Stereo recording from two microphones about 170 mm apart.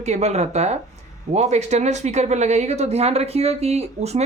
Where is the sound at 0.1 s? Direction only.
40° right (ahead or behind).